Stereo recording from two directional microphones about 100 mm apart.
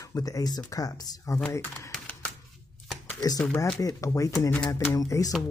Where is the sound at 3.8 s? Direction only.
30° left (ahead or behind).